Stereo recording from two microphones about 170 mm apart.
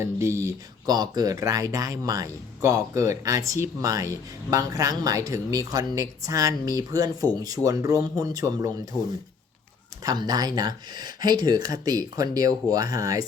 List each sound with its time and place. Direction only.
0.0 s speech: 15° right (ahead or behind)
10.0 s speech: 20° right (ahead or behind)